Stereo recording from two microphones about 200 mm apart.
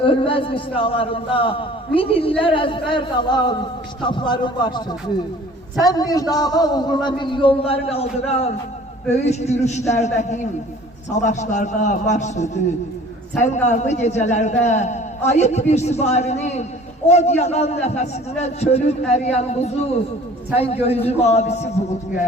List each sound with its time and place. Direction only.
0.0 s a man's voice: 25° left (ahead or behind)